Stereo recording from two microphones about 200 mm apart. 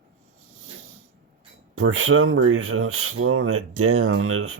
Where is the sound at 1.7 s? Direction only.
90° right.